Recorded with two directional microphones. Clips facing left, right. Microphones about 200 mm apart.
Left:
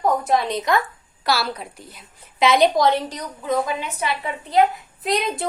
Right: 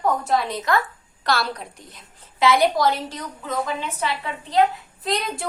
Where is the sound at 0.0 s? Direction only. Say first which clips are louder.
Left 2 dB; 20° left (ahead or behind).